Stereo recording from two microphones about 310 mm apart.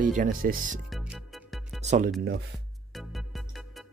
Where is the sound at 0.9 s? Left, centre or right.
Centre.